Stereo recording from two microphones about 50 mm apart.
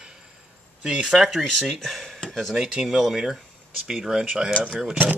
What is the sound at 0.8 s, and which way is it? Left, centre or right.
Speech, centre.